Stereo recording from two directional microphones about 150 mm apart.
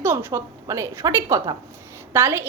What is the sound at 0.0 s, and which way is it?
A woman's voice, 15° right (ahead or behind).